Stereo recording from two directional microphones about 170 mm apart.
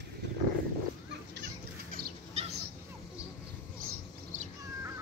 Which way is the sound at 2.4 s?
40° right (ahead or behind).